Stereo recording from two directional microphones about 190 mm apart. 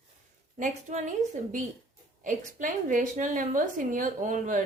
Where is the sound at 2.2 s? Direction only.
45° right (ahead or behind).